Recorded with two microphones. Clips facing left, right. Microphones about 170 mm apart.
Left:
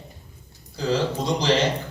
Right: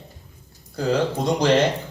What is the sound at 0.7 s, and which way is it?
Speech, 55° right (ahead or behind).